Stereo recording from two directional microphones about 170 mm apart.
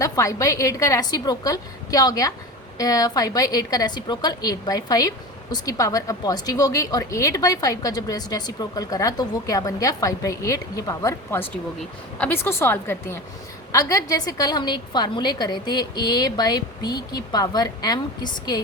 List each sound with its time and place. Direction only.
0.0 s a woman's voice: 20° left (ahead or behind)